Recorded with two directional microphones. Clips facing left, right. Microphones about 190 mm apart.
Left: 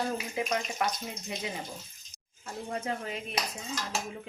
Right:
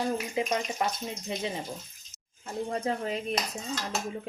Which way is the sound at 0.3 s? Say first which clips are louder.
Right 2 dB; 25° right (ahead or behind).